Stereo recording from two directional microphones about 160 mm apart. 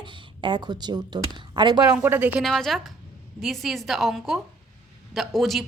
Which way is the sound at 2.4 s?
Centre (ahead or behind).